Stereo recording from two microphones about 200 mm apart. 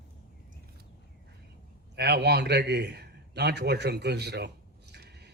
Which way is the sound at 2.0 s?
55° right (ahead or behind).